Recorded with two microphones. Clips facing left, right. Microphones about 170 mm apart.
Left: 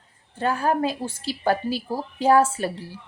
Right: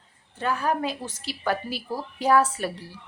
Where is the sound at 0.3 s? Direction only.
35° left (ahead or behind).